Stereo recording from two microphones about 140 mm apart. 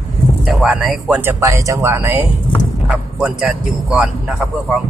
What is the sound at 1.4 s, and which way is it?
Speech, 20° right (ahead or behind).